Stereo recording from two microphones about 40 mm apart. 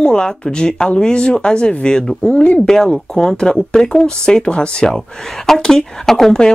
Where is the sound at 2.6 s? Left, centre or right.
Centre.